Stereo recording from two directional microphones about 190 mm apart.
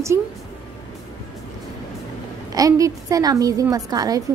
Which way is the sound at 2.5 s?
20° right (ahead or behind).